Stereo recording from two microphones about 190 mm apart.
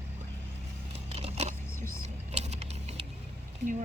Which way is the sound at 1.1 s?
35° right (ahead or behind).